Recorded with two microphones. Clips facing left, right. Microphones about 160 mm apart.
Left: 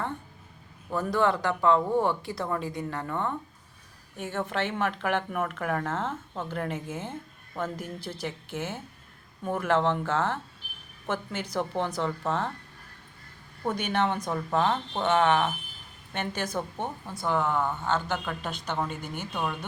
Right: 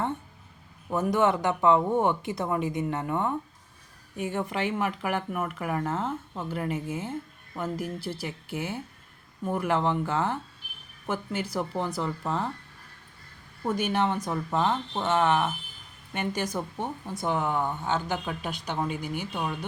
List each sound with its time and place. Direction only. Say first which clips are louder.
0.9 s speech: right 2 dB; 20° right (ahead or behind)
13.7 s speech: right 1 dB; 5° right (ahead or behind)